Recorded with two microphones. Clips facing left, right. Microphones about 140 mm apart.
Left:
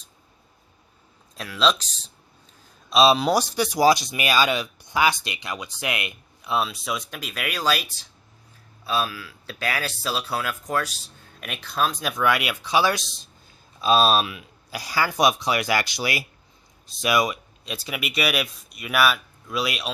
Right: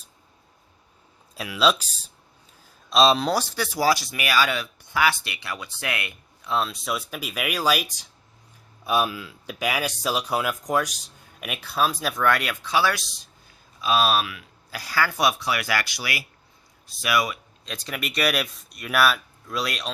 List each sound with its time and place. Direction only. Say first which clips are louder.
1.4 s speech: right 1 dB; 5° right (ahead or behind)
2.9 s speech: left 1 dB; 5° left (ahead or behind)